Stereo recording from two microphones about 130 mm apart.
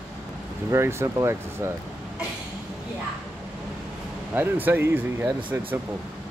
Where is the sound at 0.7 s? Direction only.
20° right (ahead or behind).